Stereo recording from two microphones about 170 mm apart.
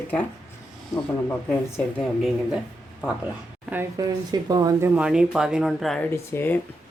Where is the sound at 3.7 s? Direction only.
15° right (ahead or behind).